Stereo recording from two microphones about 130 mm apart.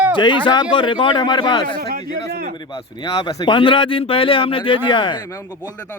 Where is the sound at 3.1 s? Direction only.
40° left (ahead or behind).